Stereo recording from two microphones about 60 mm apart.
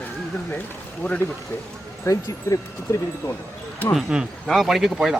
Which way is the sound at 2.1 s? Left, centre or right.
Left.